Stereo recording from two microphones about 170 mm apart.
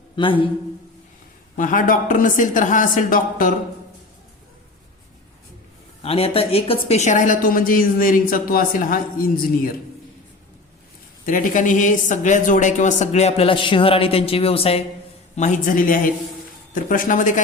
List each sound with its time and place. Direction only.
0.2 s speech: 30° left (ahead or behind)
1.5 s speech: 50° left (ahead or behind)
6.0 s speech: 35° left (ahead or behind); by 9.4 s 60° left (ahead or behind)
11.3 s speech: 50° left (ahead or behind); by 14.8 s 35° left (ahead or behind)
15.4 s speech: 45° left (ahead or behind)